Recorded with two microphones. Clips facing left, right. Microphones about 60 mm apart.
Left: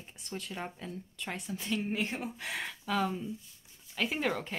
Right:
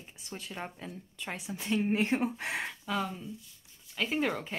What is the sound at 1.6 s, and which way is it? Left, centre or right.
Speech, right.